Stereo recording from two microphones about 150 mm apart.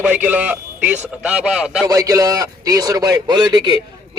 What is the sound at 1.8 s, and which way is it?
A man's voice, 20° right (ahead or behind).